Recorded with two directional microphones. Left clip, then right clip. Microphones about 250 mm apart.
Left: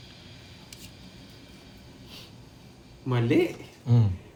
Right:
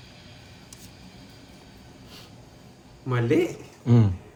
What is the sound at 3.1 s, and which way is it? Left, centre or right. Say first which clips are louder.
Speech: right 1 dB; centre.